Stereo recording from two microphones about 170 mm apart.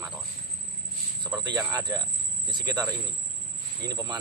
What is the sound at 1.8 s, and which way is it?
A man's voice, 20° right (ahead or behind).